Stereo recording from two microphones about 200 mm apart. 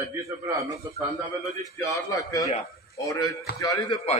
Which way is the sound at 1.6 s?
15° left (ahead or behind).